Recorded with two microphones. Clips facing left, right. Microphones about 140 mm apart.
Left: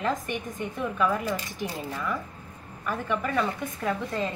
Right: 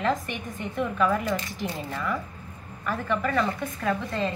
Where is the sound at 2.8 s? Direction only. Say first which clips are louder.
Right 2 dB; 10° left (ahead or behind).